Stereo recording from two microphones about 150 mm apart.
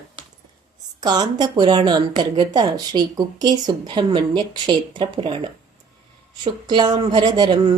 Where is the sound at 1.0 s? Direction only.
25° right (ahead or behind).